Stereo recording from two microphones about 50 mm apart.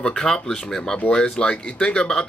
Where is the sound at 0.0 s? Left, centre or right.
Centre.